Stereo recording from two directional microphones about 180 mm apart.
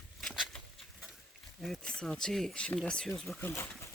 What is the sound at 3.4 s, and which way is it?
Speech, 15° left (ahead or behind).